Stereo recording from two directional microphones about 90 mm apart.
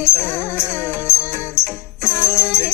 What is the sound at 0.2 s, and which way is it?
Music, 25° left (ahead or behind).